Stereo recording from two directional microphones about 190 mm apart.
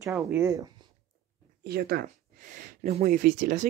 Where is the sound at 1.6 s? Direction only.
55° right (ahead or behind).